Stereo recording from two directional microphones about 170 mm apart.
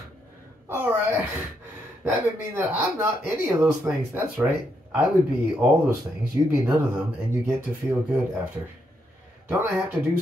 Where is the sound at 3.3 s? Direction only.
15° right (ahead or behind).